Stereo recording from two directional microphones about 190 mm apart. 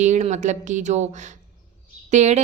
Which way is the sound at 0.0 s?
40° right (ahead or behind).